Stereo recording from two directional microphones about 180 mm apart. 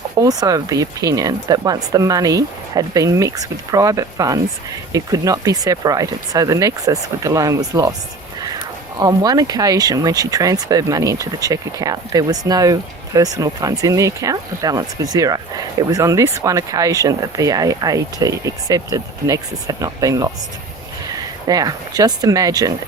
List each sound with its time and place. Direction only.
0.2 s speech: 20° right (ahead or behind)
9.0 s speech: 20° right (ahead or behind)
21.4 s speech: 20° right (ahead or behind)